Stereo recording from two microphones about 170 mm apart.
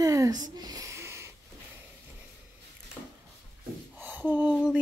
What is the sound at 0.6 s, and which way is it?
Wheeze, 25° right (ahead or behind).